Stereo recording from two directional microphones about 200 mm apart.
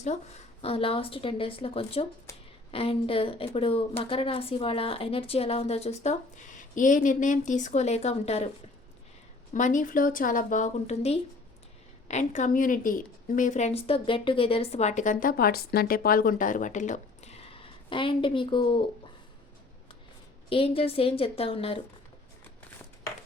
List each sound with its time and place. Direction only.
0.6 s a woman's voice: 30° left (ahead or behind)
9.5 s a woman's voice: 40° left (ahead or behind)
20.5 s a woman's voice: 25° left (ahead or behind)